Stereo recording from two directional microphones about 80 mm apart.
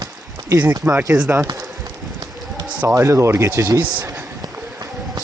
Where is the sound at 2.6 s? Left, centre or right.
Right.